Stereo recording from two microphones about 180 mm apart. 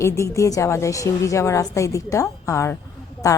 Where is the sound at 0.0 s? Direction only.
15° left (ahead or behind).